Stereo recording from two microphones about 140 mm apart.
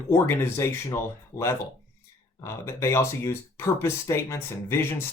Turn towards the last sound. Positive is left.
turn(degrees=20)  # may be behind; listen again after turning